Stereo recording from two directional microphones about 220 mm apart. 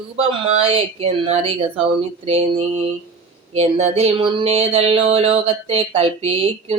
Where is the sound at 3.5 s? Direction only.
30° right (ahead or behind).